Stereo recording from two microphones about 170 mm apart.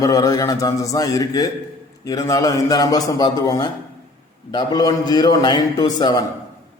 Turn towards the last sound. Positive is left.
turn(degrees=25)  # may be behind; listen again after turning